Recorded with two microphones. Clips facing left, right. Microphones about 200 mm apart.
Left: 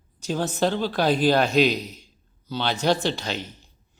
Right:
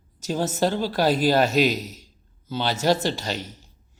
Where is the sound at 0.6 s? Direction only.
10° right (ahead or behind).